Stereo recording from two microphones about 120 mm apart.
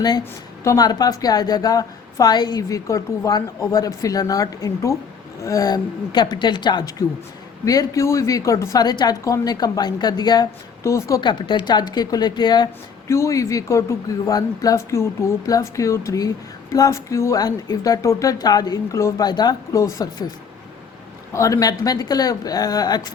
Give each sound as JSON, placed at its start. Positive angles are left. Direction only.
{"t": 0.6, "sound": "a woman's voice", "side_deg": 30}
{"t": 11.2, "sound": "speech", "side_deg": 40}
{"t": 13.1, "sound": "a woman's voice", "side_deg": 25}
{"t": 21.3, "sound": "speech", "side_deg": 25}